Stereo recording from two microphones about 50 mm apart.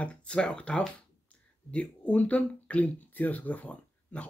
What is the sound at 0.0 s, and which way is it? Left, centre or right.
Speech, left.